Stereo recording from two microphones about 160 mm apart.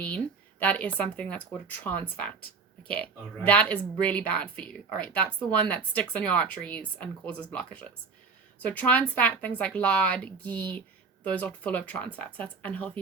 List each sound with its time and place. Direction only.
0.6 s speech: 10° left (ahead or behind)